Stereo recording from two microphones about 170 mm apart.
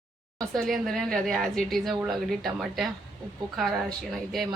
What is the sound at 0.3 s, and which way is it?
Speech, centre (ahead or behind).